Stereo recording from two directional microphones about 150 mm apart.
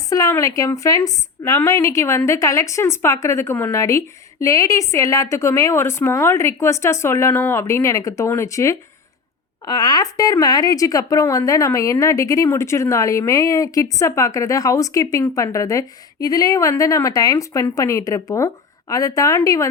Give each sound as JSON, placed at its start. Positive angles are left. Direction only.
{"t": 0.1, "sound": "a woman's voice", "side_deg": 20}